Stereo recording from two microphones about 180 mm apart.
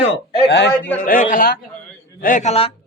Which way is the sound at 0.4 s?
75° left (ahead or behind).